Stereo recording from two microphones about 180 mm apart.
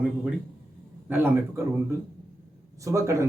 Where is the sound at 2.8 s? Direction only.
15° right (ahead or behind).